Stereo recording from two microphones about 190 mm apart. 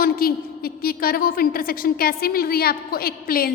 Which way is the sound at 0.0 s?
50° left (ahead or behind).